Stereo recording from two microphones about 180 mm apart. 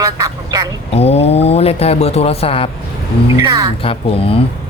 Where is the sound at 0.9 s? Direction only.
35° left (ahead or behind).